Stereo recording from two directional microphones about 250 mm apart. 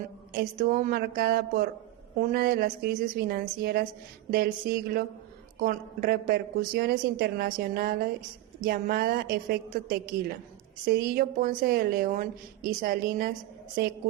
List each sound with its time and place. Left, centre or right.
0.3 s a woman's voice: right